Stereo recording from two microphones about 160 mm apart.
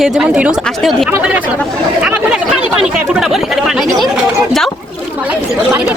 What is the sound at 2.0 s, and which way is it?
Chatter, 5° right (ahead or behind).